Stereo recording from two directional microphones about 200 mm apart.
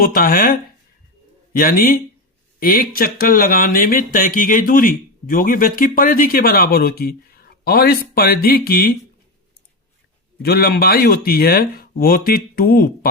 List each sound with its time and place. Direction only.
0.0 s speech: 45° left (ahead or behind)
1.5 s speech: 45° left (ahead or behind)
10.4 s speech: 50° left (ahead or behind)